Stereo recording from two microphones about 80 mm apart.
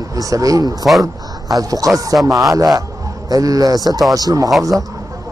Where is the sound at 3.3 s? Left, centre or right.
Right.